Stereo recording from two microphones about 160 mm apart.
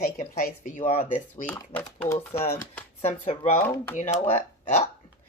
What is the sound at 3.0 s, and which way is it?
Speech, 40° left (ahead or behind).